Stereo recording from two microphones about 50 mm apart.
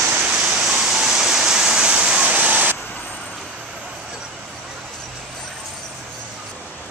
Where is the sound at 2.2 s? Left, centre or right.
Right.